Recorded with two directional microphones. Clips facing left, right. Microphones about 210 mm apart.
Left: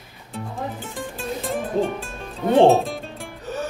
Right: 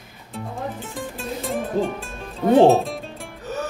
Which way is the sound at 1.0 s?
Centre (ahead or behind).